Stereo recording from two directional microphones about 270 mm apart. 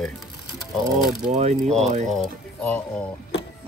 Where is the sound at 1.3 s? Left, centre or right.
Right.